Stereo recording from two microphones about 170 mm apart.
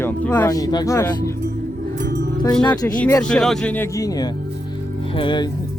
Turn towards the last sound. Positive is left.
turn(degrees=30)  # may be behind; listen again after turning